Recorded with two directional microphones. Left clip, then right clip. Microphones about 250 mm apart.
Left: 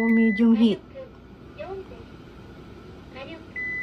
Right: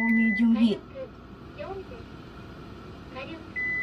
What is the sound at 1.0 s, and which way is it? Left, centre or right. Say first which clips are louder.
Vehicle: right 2 dB; centre.